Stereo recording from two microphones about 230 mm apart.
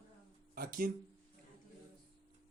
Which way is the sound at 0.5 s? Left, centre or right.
Right.